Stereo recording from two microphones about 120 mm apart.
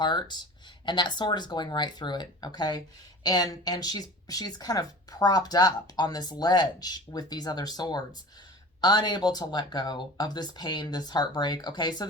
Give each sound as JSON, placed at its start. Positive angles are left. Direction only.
{"t": 0.0, "sound": "speech", "side_deg": 40}